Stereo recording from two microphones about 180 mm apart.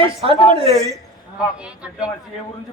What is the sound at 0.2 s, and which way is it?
Speech, 35° right (ahead or behind).